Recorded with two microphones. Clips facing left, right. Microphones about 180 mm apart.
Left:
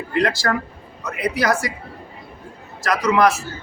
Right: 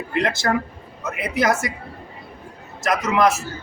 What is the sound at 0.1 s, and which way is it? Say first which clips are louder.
A man's voice: left 1 dB; 20° right (ahead or behind).